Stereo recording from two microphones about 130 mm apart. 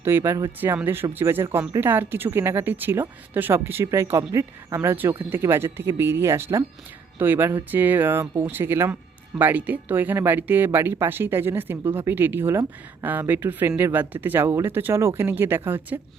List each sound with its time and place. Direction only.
0.0 s speech: 20° right (ahead or behind)